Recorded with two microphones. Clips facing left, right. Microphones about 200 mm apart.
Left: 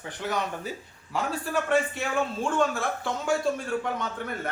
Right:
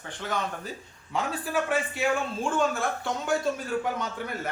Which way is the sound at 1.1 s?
5° right (ahead or behind).